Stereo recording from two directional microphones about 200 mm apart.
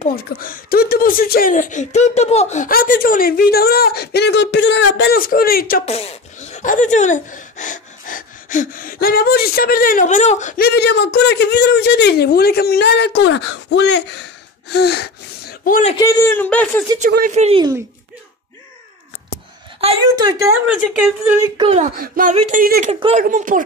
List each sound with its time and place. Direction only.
0.1 s speech: 45° left (ahead or behind)
5.9 s speech: 30° left (ahead or behind)
10.6 s a woman's voice: 55° left (ahead or behind)
16.0 s speech: 15° left (ahead or behind)
17.3 s speech: 30° right (ahead or behind)
19.8 s a woman's voice: 30° right (ahead or behind)
20.6 s speech: 5° right (ahead or behind)
21.5 s speech: 30° right (ahead or behind)
22.3 s speech: 30° right (ahead or behind)
22.6 s speech: 45° right (ahead or behind)
22.8 s a woman's voice: 30° right (ahead or behind)
23.2 s speech: 40° right (ahead or behind)